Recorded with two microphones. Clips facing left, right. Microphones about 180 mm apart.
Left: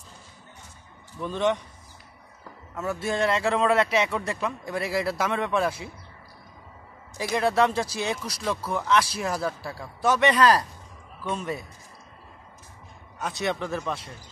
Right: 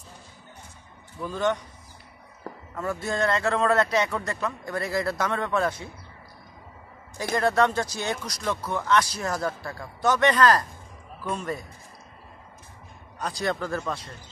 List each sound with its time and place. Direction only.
1.2 s speech: centre (ahead or behind)
2.7 s speech: 5° left (ahead or behind)
7.3 s speech: 5° left (ahead or behind)
13.2 s speech: centre (ahead or behind)